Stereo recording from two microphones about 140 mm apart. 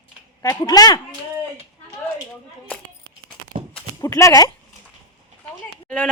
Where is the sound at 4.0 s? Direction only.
25° left (ahead or behind).